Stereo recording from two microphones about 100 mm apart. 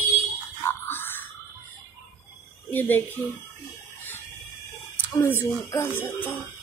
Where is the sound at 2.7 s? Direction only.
20° left (ahead or behind).